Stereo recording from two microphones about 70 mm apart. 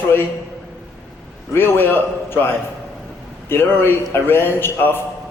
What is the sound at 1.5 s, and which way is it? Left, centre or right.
A man's voice, left.